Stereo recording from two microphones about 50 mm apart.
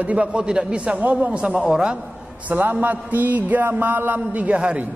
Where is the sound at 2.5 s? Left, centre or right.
Right.